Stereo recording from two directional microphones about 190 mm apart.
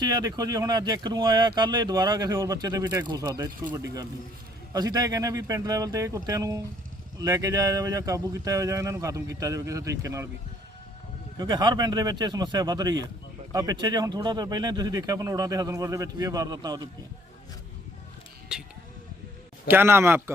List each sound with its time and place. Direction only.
0.0 s speech: 20° right (ahead or behind)
11.3 s speech: 20° right (ahead or behind)
18.5 s speech: 5° right (ahead or behind)